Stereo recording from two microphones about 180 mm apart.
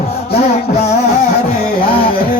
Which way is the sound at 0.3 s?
35° left (ahead or behind).